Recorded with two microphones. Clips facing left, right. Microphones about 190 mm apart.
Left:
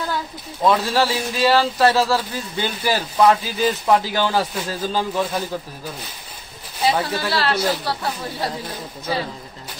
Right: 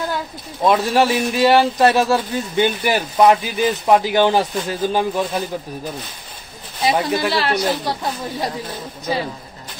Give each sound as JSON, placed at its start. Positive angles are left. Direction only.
{"t": 0.7, "sound": "speech", "side_deg": -15}
{"t": 6.8, "sound": "speech", "side_deg": -10}